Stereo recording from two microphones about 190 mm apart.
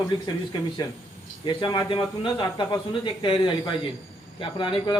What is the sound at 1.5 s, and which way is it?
A man's voice, 25° left (ahead or behind).